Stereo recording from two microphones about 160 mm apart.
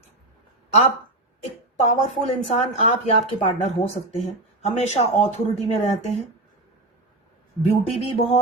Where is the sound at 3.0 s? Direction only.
40° left (ahead or behind).